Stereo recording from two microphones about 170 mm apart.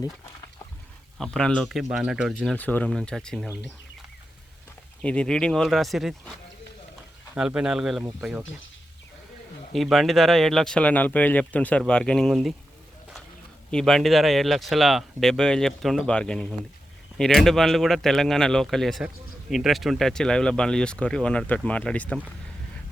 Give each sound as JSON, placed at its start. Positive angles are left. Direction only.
{"t": 1.2, "sound": "speech", "side_deg": 5}
{"t": 5.0, "sound": "speech", "side_deg": 5}
{"t": 7.3, "sound": "speech", "side_deg": -5}
{"t": 9.7, "sound": "speech", "side_deg": 0}
{"t": 13.7, "sound": "speech", "side_deg": 5}